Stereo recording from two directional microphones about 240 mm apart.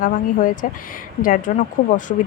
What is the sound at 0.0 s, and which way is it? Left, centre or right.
Speech, left.